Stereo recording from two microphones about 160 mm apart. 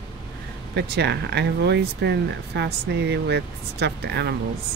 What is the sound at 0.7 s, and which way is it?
Speech, 90° right.